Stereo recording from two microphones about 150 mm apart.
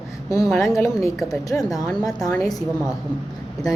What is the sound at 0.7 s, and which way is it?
A woman's voice, 20° left (ahead or behind).